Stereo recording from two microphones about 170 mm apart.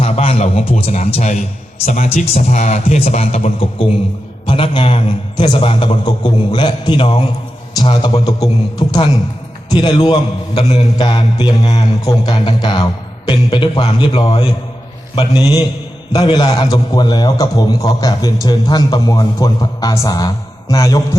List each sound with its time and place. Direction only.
0.0 s a man's voice: 35° left (ahead or behind)
8.2 s a man's voice: 20° left (ahead or behind)
9.6 s a man's voice: 25° left (ahead or behind)